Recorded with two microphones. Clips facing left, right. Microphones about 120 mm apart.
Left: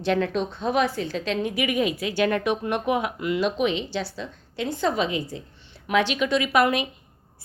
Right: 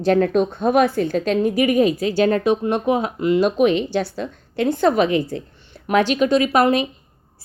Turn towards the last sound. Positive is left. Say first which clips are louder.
# right 5 dB
turn(degrees=-35)  # may be behind; listen again after turning